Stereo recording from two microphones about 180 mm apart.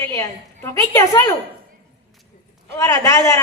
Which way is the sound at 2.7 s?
20° left (ahead or behind).